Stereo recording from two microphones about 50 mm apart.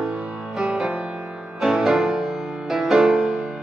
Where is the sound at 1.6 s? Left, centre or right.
Centre.